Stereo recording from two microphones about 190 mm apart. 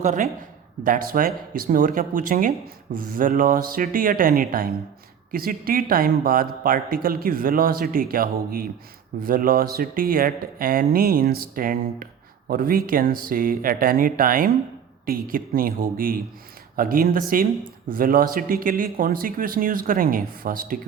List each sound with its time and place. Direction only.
0.0 s speech: 40° right (ahead or behind)